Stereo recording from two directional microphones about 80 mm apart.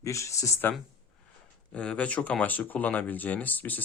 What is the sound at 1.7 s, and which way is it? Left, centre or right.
Speech, centre.